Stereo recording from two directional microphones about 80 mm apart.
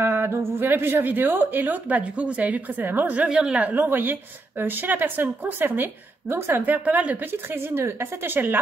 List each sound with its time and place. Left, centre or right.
0.0 s speech: right
3.3 s a woman's voice: centre
3.7 s speech: right